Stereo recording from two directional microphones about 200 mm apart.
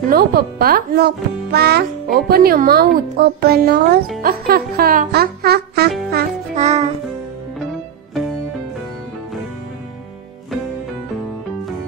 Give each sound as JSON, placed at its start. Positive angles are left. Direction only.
{"t": 0.1, "sound": "a child's voice", "side_deg": -50}
{"t": 6.5, "sound": "music", "side_deg": -35}